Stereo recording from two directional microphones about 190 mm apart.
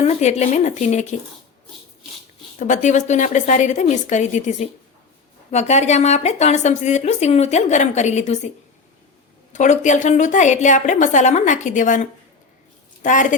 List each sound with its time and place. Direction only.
0.0 s a woman's voice: 35° left (ahead or behind)
2.6 s a woman's voice: 40° left (ahead or behind)
9.5 s a woman's voice: 40° left (ahead or behind)